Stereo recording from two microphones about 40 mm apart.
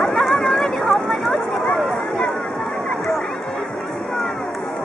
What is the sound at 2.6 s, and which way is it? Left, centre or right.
Vehicle, centre.